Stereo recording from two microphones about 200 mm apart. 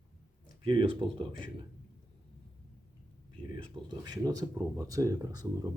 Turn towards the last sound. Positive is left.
turn(degrees=-15)  # may be behind; listen again after turning